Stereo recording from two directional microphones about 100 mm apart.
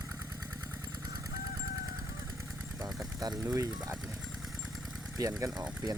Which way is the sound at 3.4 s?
35° right (ahead or behind).